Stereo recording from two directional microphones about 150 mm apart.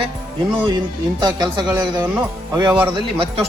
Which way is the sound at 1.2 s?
30° right (ahead or behind).